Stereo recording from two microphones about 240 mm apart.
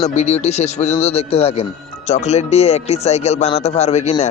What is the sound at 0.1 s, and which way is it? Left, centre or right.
Speech, left.